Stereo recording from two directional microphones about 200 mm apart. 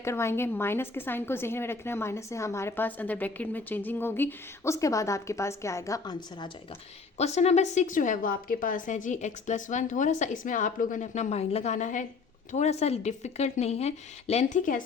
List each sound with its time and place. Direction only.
0.0 s a woman's voice: 15° left (ahead or behind)
7.2 s a woman's voice: 35° left (ahead or behind)